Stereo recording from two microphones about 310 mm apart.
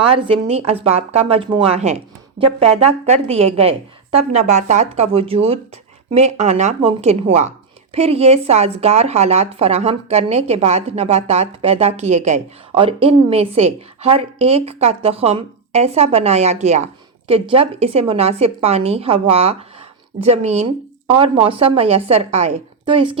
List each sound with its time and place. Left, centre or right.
0.1 s speech: centre